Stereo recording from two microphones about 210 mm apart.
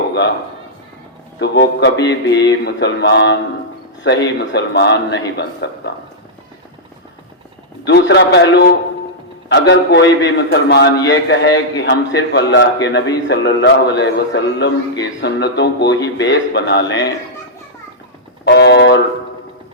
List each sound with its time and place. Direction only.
1.4 s a man's voice: 55° left (ahead or behind)
7.9 s a man's voice: 55° left (ahead or behind)
18.4 s a man's voice: 55° left (ahead or behind)